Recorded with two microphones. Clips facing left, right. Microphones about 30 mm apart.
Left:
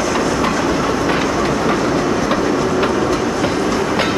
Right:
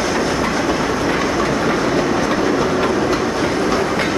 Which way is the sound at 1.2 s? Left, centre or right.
Centre.